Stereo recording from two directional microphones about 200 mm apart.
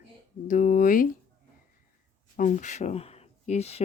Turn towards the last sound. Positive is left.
turn(degrees=30)  # may be behind; listen again after turning